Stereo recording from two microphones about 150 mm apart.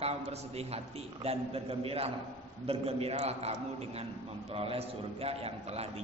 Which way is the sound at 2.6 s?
40° right (ahead or behind).